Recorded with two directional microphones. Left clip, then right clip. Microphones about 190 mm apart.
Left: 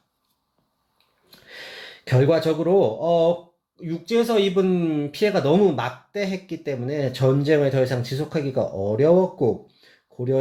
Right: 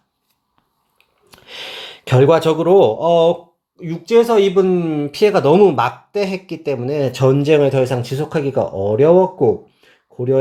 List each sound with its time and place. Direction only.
2.4 s speech: 5° left (ahead or behind)
3.0 s speech: 25° right (ahead or behind)
10.1 s a sound: 25° right (ahead or behind)